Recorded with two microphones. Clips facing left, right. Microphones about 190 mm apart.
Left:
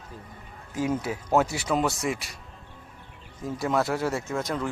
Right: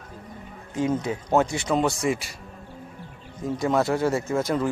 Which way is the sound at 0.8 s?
5° left (ahead or behind).